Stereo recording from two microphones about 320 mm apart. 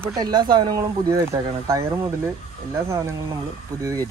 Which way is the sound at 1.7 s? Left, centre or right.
Centre.